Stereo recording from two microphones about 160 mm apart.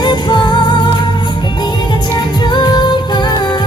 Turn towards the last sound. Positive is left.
turn(degrees=25)  # may be behind; listen again after turning